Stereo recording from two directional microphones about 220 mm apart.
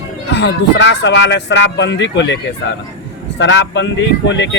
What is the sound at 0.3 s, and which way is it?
Speech, 55° left (ahead or behind).